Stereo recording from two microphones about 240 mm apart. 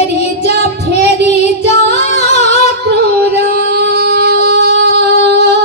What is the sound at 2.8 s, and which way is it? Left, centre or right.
Music, right.